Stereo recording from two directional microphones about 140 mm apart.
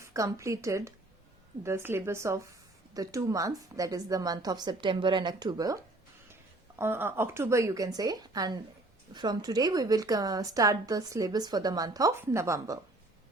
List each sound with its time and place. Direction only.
0.0 s a woman's voice: 20° right (ahead or behind)
6.7 s a woman's voice: 15° right (ahead or behind)